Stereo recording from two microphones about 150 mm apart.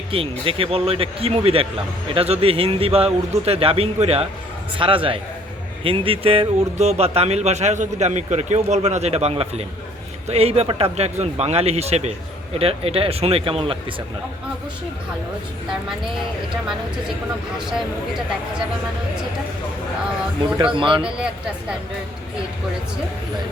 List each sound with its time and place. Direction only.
0.1 s speech: 35° right (ahead or behind)
20.7 s speech: 35° right (ahead or behind)